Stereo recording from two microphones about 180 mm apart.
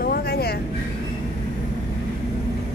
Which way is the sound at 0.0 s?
60° left (ahead or behind).